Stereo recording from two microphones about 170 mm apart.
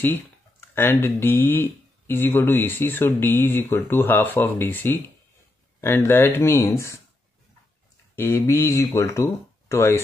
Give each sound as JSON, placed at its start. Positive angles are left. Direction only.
{"t": 0.7, "sound": "speech", "side_deg": 15}
{"t": 8.2, "sound": "speech", "side_deg": 15}